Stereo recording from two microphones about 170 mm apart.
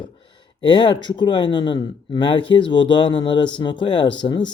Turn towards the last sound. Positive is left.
turn(degrees=25)  # may be behind; listen again after turning